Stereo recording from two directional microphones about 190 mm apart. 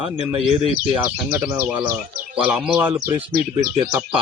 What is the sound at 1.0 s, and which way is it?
Speech, 10° right (ahead or behind).